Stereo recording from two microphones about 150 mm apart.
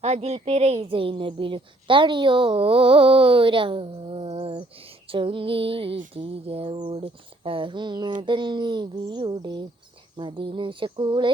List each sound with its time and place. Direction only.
0.0 s a woman's voice: 45° right (ahead or behind)